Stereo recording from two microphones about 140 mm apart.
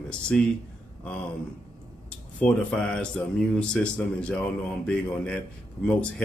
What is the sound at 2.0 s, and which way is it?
Speech, 5° left (ahead or behind).